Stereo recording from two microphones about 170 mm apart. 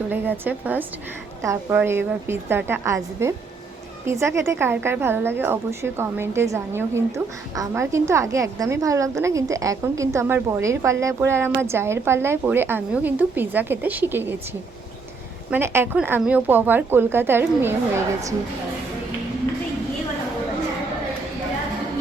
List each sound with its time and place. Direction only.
0.1 s a woman's voice: 10° right (ahead or behind)
15.4 s a woman's voice: 15° right (ahead or behind)